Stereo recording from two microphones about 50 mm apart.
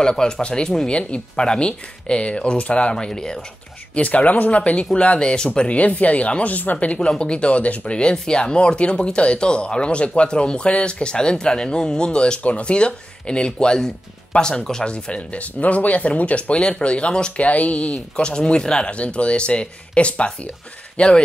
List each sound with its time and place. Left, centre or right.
0.0 s speech: centre
3.9 s speech: left